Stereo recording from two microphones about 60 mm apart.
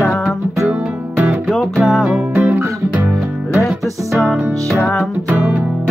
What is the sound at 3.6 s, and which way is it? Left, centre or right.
Music, centre.